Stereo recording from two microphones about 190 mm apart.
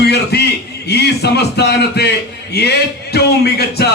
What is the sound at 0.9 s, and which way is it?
A man's voice, 60° left (ahead or behind).